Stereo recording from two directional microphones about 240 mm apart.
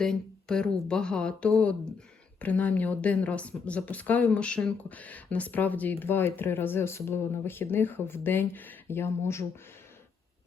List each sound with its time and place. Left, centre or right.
0.0 s speech: centre